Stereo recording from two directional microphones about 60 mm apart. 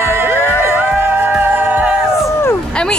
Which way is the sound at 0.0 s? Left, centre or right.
Right.